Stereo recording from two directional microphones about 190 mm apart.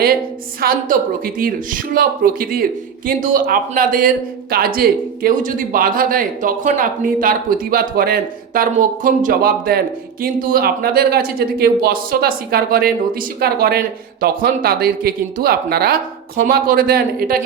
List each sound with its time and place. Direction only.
0.6 s speech: 50° right (ahead or behind)